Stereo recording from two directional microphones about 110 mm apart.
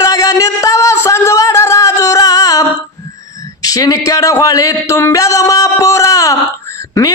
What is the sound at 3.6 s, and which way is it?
Speech, 35° left (ahead or behind).